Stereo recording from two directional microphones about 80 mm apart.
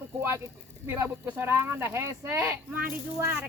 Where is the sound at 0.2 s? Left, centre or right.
Right.